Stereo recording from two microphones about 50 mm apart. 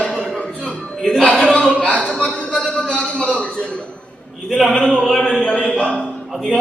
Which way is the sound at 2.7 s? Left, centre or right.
Left.